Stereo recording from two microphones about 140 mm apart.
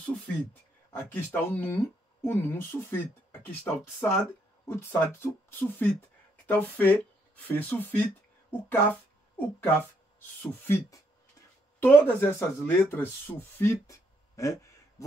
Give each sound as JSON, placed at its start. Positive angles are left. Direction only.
{"t": 0.0, "sound": "speech", "side_deg": 15}
{"t": 10.4, "sound": "speech", "side_deg": 15}